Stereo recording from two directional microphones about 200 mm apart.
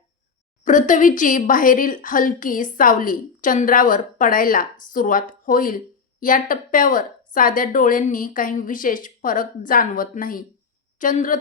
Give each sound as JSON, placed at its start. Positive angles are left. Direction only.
{"t": 0.6, "sound": "a woman's voice", "side_deg": 40}